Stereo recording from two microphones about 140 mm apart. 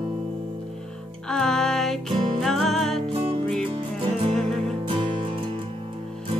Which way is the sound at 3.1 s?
40° right (ahead or behind).